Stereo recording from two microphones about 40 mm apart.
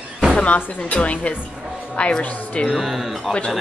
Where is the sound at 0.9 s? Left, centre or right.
Left.